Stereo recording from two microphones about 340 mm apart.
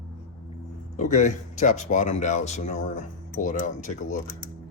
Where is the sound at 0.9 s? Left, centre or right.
Left.